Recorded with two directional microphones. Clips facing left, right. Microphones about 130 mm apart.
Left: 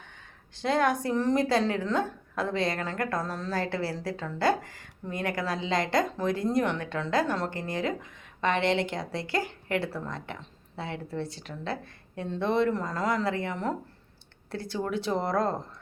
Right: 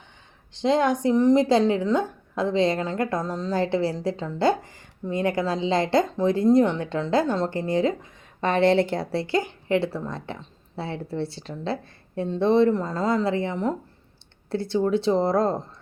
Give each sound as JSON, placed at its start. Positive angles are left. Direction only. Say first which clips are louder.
{"t": 0.5, "sound": "speech", "louder": "right 4 dB", "side_deg": -20}